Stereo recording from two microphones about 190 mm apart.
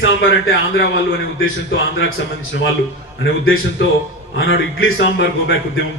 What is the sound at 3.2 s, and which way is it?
A man's voice, 90° left.